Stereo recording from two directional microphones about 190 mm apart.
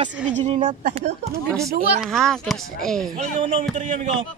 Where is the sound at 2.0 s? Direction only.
Centre (ahead or behind).